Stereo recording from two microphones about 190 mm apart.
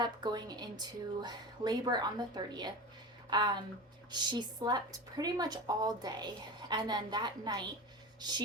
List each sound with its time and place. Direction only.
0.0 s a woman's voice: 20° right (ahead or behind)